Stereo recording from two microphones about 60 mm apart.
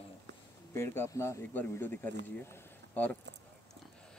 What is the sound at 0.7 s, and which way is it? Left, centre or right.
Speech, left.